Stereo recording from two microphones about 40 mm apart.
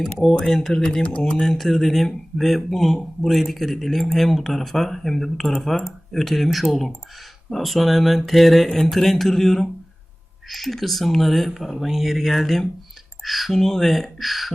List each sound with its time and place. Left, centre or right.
0.4 s a man's voice: centre
0.7 s a man's voice: centre